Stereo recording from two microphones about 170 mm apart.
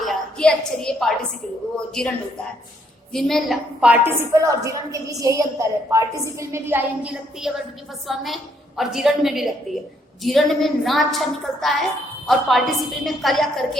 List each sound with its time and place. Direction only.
0.0 s a woman's voice: centre (ahead or behind)
3.1 s a woman's voice: centre (ahead or behind)